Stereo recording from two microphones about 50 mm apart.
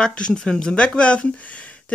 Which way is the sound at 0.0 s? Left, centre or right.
Centre.